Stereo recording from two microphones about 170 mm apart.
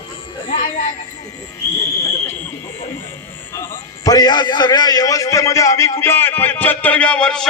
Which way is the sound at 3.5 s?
20° left (ahead or behind).